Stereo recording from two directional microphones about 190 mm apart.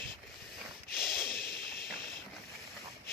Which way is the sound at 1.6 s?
Centre (ahead or behind).